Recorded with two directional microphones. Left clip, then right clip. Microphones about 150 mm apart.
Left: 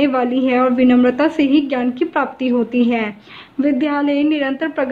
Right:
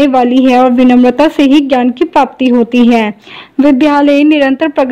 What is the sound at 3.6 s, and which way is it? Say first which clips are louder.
A woman's voice: right 10 dB; 90° right.